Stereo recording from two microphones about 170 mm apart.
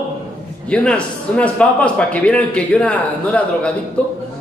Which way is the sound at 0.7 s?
5° left (ahead or behind).